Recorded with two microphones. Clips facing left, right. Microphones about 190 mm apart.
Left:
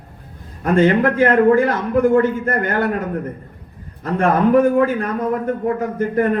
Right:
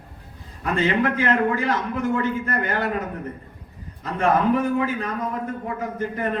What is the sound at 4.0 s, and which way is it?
A man's voice, 55° left (ahead or behind).